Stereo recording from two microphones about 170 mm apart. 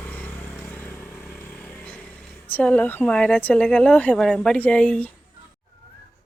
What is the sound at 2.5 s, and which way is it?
Speech, 10° left (ahead or behind).